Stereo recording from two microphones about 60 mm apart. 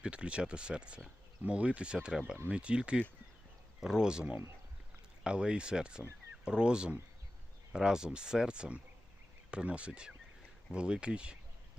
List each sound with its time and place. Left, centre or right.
0.0 s speech: centre